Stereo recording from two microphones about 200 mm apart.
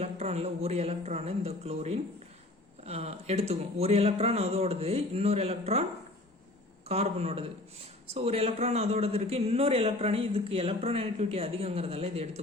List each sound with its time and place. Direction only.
0.0 s speech: 30° right (ahead or behind)
6.8 s a man's voice: 30° right (ahead or behind)